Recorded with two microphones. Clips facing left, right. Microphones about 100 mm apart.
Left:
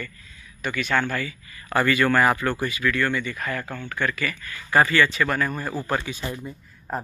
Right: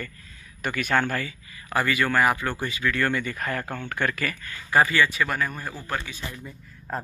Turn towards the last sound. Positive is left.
turn(degrees=15)  # may be behind; listen again after turning